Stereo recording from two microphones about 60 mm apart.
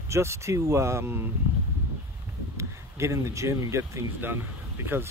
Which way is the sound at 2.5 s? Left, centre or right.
Right.